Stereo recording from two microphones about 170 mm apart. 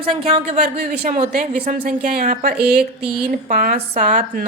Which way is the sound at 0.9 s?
60° right (ahead or behind).